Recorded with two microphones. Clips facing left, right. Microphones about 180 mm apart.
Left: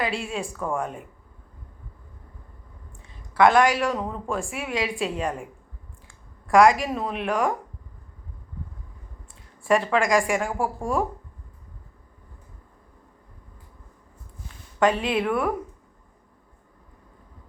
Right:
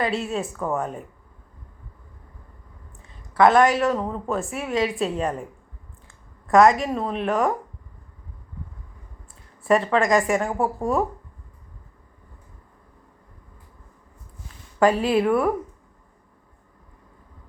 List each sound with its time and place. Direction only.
0.0 s speech: centre (ahead or behind)
3.0 s speech: centre (ahead or behind)
6.5 s speech: centre (ahead or behind)
9.6 s speech: centre (ahead or behind)
10.4 s speech: 20° right (ahead or behind)
10.8 s speech: centre (ahead or behind)
14.8 s speech: 5° right (ahead or behind)